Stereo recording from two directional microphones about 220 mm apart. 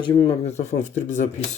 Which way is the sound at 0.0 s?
25° left (ahead or behind).